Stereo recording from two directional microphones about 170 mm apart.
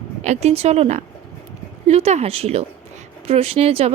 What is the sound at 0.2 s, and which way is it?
Speech, 40° right (ahead or behind).